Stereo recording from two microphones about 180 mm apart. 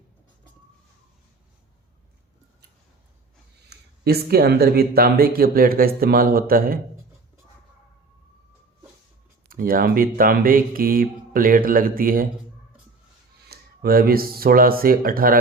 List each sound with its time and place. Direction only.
3.7 s speech: 60° right (ahead or behind)
9.5 s speech: 55° right (ahead or behind)
13.5 s speech: 55° right (ahead or behind)